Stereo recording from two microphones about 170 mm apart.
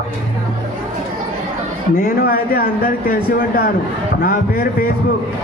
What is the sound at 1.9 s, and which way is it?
Speech, 60° left (ahead or behind).